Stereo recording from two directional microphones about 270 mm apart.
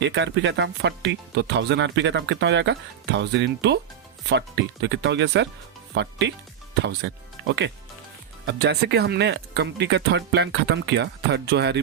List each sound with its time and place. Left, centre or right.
0.0 s speech: right